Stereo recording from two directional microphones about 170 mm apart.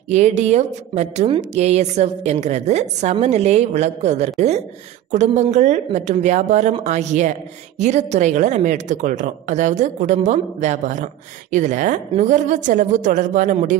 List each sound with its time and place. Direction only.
0.1 s a woman's voice: 40° right (ahead or behind)